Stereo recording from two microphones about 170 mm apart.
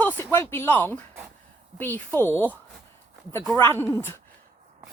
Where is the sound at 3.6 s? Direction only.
15° left (ahead or behind).